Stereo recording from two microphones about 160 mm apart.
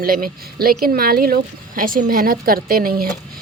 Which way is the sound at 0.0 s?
65° right (ahead or behind).